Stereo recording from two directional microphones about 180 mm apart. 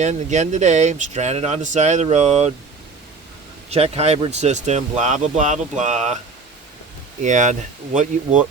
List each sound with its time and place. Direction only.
0.0 s speech: 40° right (ahead or behind)
3.7 s speech: 35° right (ahead or behind)
7.2 s speech: 40° right (ahead or behind)